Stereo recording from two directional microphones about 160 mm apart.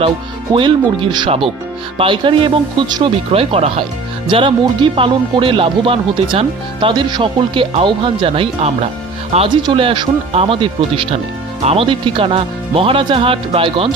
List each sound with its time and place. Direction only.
0.5 s speech: 30° right (ahead or behind)